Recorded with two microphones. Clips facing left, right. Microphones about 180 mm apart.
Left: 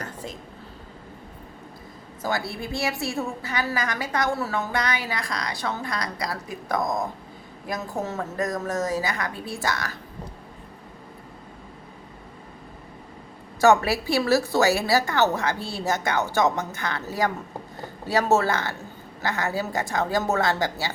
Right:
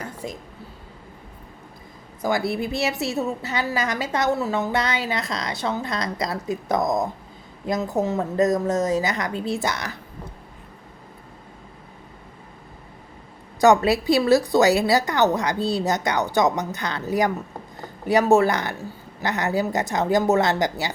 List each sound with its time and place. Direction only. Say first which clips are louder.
2.2 s a woman's voice: right 5 dB; 20° right (ahead or behind)
13.6 s a woman's voice: right 2 dB; 20° right (ahead or behind)